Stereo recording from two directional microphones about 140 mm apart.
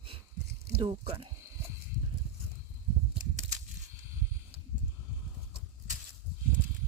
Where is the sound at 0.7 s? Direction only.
40° right (ahead or behind).